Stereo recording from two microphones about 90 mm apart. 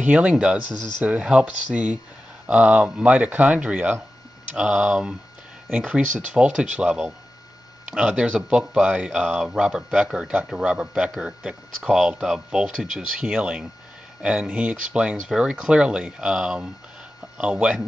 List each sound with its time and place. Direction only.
0.0 s speech: 15° right (ahead or behind)